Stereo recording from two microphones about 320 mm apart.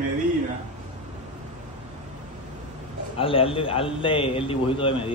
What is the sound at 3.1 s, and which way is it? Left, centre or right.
A man's voice, centre.